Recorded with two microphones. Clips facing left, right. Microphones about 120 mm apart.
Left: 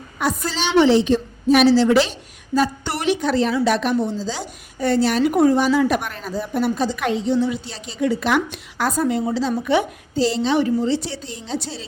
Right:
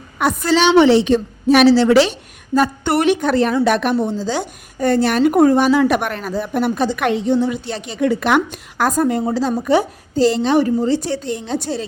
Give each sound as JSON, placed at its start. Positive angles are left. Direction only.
{"t": 0.2, "sound": "a woman's voice", "side_deg": -65}
{"t": 2.6, "sound": "a woman's voice", "side_deg": -55}
{"t": 8.4, "sound": "a woman's voice", "side_deg": -45}